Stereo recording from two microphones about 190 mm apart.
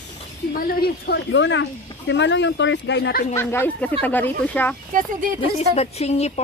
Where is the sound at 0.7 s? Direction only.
55° left (ahead or behind).